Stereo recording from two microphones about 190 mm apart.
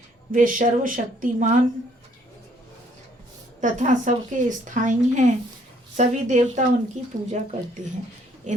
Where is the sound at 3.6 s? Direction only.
40° right (ahead or behind).